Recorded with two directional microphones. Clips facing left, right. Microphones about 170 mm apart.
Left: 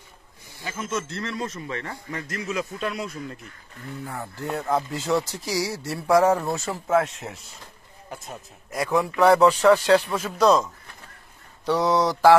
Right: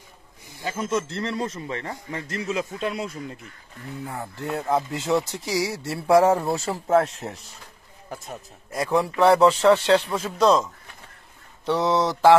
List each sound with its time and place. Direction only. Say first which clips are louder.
0.6 s a man's voice: right 4 dB; 30° right (ahead or behind)
4.6 s a man's voice: right 1 dB; 20° right (ahead or behind)
8.1 s a man's voice: right 2 dB; 35° right (ahead or behind)
11.6 s a man's voice: left 1 dB; 25° right (ahead or behind)